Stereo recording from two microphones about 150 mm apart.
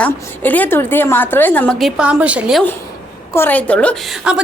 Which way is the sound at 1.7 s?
5° right (ahead or behind).